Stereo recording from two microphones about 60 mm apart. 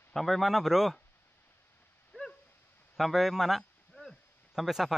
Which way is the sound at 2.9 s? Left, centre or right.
Centre.